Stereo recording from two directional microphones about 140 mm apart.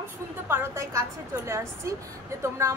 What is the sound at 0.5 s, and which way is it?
A woman's voice, 20° right (ahead or behind).